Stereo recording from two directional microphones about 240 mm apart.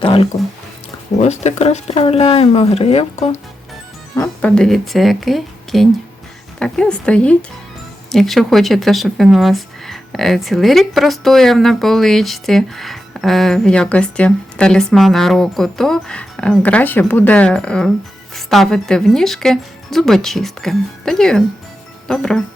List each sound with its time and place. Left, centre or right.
0.0 s speech: left
4.1 s speech: centre